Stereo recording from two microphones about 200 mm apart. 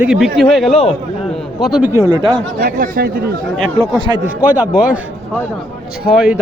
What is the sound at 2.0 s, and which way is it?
Speech, 20° right (ahead or behind).